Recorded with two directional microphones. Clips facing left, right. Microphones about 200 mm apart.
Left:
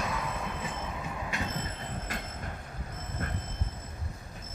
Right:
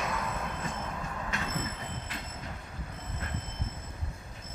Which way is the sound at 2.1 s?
45° left (ahead or behind).